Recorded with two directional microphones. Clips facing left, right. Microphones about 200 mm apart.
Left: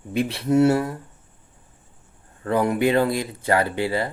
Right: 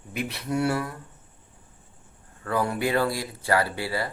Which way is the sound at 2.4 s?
20° left (ahead or behind).